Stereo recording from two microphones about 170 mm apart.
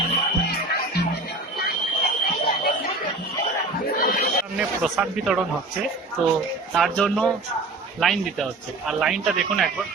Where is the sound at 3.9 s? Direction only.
60° left (ahead or behind).